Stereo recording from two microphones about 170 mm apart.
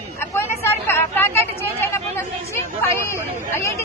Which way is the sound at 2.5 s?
15° left (ahead or behind).